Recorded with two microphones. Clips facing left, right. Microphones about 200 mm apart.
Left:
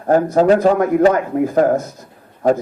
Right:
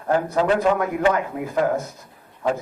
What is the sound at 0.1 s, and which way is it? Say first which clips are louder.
A man's voice: left 7 dB; 45° left (ahead or behind).